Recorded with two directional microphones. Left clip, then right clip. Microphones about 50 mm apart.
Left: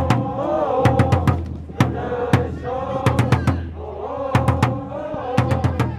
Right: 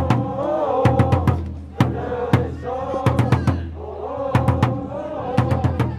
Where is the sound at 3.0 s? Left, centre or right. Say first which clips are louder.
Left 1 dB; left.